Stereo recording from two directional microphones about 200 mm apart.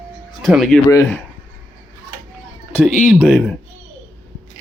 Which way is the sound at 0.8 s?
15° left (ahead or behind).